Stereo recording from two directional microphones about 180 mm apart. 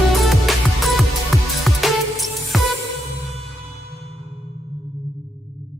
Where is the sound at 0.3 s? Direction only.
Centre (ahead or behind).